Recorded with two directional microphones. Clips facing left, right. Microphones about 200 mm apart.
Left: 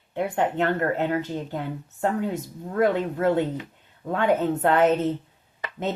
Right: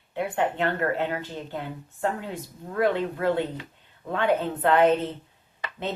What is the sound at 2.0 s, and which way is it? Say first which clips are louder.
A woman's voice: left 4 dB; 45° left (ahead or behind).